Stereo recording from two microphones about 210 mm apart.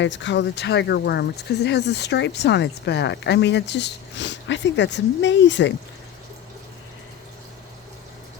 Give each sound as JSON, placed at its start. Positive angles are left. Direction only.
{"t": 0.0, "sound": "speech", "side_deg": 60}